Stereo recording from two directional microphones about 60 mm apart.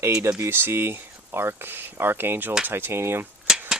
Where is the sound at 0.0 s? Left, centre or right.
Right.